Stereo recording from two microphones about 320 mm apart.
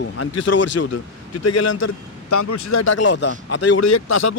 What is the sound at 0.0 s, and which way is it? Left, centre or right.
A man's voice, left.